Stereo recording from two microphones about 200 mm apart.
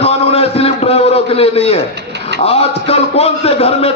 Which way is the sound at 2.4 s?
30° left (ahead or behind).